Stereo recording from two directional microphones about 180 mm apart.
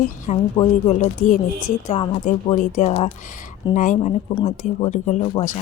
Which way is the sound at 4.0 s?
30° left (ahead or behind).